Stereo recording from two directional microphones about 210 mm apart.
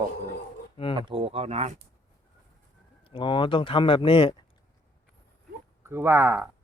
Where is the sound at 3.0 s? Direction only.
25° left (ahead or behind).